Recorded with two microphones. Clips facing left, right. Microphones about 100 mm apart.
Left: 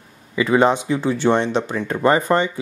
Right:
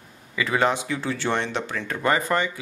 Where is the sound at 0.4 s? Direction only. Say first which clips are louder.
Left 7 dB; 20° left (ahead or behind).